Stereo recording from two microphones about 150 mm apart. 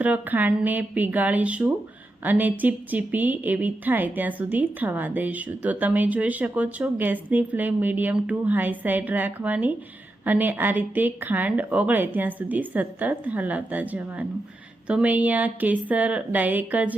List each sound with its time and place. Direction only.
0.0 s a woman's voice: 10° right (ahead or behind)